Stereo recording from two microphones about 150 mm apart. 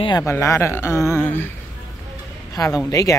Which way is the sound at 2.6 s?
20° left (ahead or behind).